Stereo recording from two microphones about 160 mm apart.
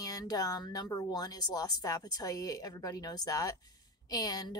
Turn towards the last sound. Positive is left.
turn(degrees=25)  # may be behind; listen again after turning